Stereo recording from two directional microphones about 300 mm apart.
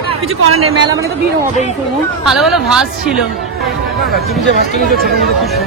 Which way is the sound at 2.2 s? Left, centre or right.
Centre.